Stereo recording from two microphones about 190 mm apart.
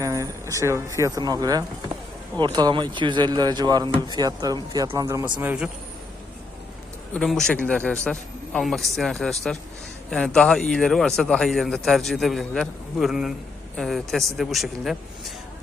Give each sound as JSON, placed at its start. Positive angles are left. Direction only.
{"t": 0.0, "sound": "speech", "side_deg": -15}
{"t": 5.4, "sound": "a man's voice", "side_deg": -5}
{"t": 7.1, "sound": "speech", "side_deg": 0}